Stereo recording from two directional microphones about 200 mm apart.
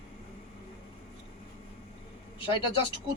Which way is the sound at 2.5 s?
25° left (ahead or behind).